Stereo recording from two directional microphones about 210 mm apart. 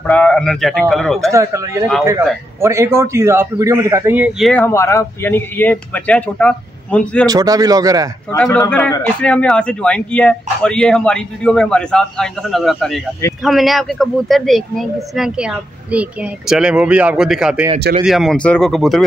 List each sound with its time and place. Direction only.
0.0 s a man's voice: 5° left (ahead or behind)
1.3 s a man's voice: 15° right (ahead or behind); by 7.2 s 5° left (ahead or behind)
7.2 s speech: 15° right (ahead or behind)
8.3 s a man's voice: 15° left (ahead or behind)